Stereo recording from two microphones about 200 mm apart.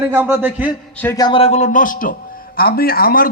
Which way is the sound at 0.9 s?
15° left (ahead or behind).